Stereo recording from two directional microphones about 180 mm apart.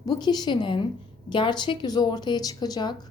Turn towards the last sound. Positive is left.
turn(degrees=25)  # may be behind; listen again after turning